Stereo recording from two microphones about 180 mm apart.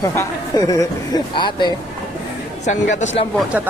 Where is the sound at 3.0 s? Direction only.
40° left (ahead or behind).